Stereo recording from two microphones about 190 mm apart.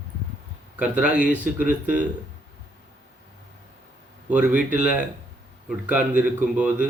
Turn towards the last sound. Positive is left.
turn(degrees=-5)  # may be behind; listen again after turning